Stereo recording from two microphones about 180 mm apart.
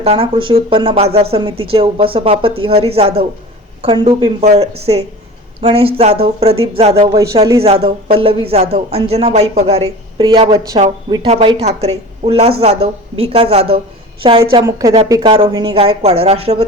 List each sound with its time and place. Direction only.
0.0 s speech: 30° right (ahead or behind)
14.5 s speech: 20° right (ahead or behind)
15.1 s speech: 30° right (ahead or behind)